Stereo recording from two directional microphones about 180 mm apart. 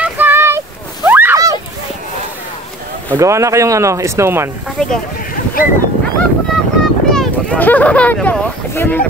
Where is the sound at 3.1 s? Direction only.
15° right (ahead or behind).